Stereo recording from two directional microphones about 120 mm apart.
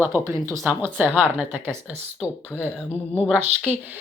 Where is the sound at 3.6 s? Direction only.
15° right (ahead or behind).